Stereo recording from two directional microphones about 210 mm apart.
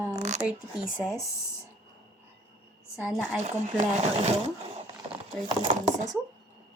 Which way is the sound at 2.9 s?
5° right (ahead or behind).